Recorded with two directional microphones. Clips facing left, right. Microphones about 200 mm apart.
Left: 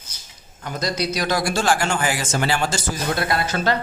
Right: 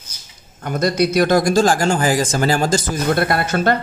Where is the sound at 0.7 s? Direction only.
55° right (ahead or behind); by 2.8 s 40° right (ahead or behind).